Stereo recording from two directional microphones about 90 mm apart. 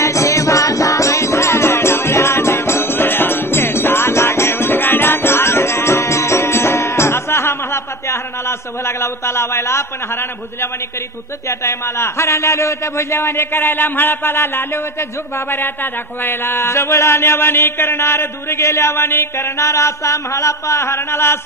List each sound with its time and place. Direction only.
0.0 s music: 35° left (ahead or behind)
11.4 s a man's voice: 30° left (ahead or behind)